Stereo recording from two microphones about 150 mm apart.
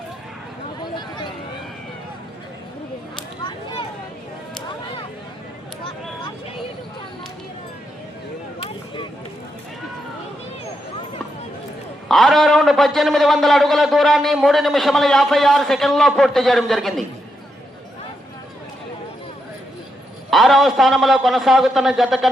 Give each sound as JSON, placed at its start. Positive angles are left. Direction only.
{"t": 3.4, "sound": "a sound", "side_deg": 30}
{"t": 12.0, "sound": "a man's voice", "side_deg": 0}
{"t": 20.3, "sound": "a man's voice", "side_deg": 0}